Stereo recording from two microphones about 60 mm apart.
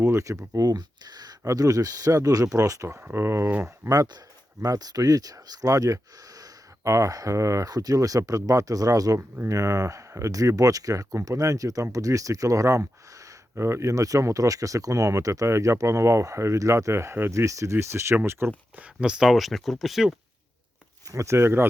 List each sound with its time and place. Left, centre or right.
0.0 s speech: right
3.0 s speech: right
3.8 s speech: right
4.6 s speech: right
6.8 s speech: right
9.5 s speech: right
13.6 s speech: right
18.8 s speech: centre
19.3 s speech: centre
21.1 s speech: right